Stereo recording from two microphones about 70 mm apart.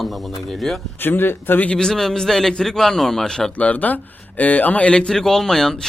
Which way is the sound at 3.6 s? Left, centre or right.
Left.